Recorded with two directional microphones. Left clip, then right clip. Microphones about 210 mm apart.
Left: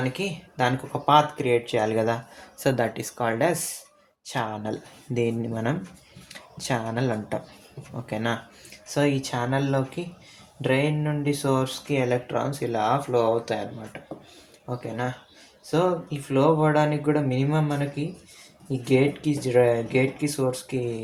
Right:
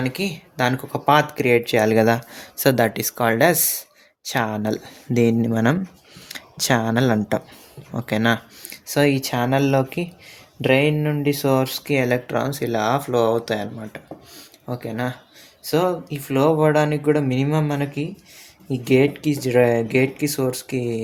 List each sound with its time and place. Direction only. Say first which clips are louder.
0.0 s speech: right 3 dB; 50° right (ahead or behind)